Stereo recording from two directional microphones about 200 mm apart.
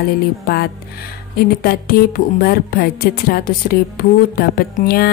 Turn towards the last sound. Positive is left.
turn(degrees=50)  # may be behind; listen again after turning